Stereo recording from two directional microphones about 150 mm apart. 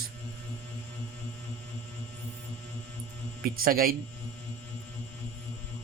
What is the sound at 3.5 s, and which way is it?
Speech, 75° right (ahead or behind).